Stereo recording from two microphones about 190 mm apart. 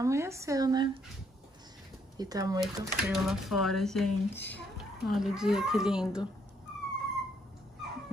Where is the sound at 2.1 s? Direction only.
20° right (ahead or behind).